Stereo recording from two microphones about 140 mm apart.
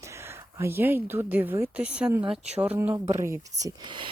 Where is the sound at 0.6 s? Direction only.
15° right (ahead or behind).